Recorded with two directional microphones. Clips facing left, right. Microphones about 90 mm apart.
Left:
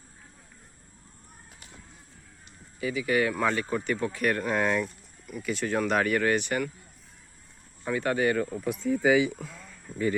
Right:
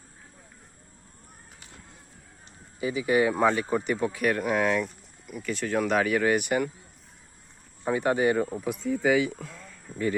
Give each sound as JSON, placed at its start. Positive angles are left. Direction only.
{"t": 2.8, "sound": "speech", "side_deg": -25}
{"t": 3.5, "sound": "speech", "side_deg": -10}
{"t": 7.9, "sound": "speech", "side_deg": -20}
{"t": 8.6, "sound": "speech", "side_deg": 0}